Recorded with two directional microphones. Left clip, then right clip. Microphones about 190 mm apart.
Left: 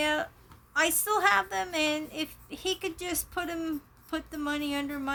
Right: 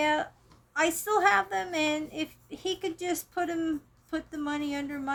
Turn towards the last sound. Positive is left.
turn(degrees=20)  # may be behind; listen again after turning